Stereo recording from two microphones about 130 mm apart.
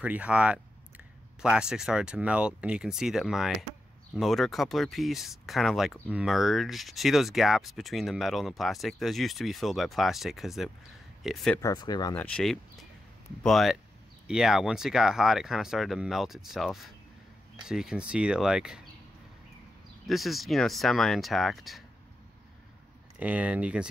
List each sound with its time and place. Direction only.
0.0 s speech: 10° right (ahead or behind)
11.6 s speech: 30° left (ahead or behind)
12.2 s speech: 10° left (ahead or behind)
20.1 s speech: centre (ahead or behind)
23.1 s speech: 10° right (ahead or behind)